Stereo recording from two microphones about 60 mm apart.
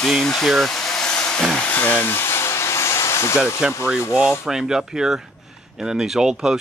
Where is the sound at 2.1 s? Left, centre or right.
Left.